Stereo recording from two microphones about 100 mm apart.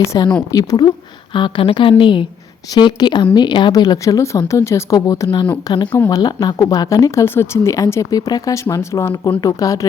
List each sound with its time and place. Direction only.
0.1 s a woman's voice: 45° left (ahead or behind)
5.7 s a woman's voice: 50° left (ahead or behind)